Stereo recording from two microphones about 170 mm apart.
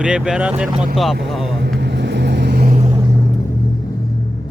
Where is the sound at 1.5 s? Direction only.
85° right; by 2.7 s 65° right (ahead or behind).